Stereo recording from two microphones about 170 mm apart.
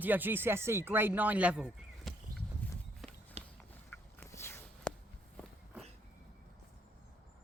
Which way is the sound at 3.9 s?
15° left (ahead or behind).